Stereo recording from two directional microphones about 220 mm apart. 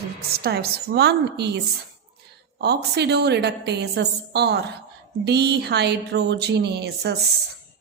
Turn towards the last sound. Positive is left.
turn(degrees=-45)  # may be behind; listen again after turning